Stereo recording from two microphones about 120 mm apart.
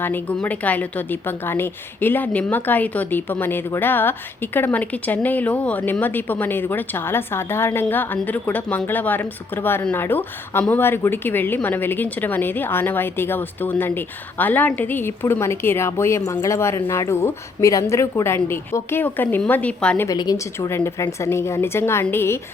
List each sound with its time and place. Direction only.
0.0 s speech: 15° left (ahead or behind)
20.1 s speech: 30° left (ahead or behind)